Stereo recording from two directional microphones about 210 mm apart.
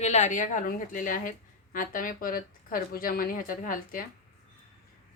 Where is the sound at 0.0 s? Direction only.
35° left (ahead or behind).